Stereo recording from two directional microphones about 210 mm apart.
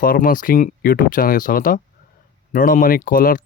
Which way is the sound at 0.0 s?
40° left (ahead or behind).